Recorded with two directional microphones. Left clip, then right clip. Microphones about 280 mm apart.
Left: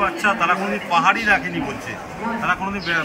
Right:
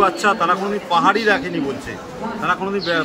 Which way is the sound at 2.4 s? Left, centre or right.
Centre.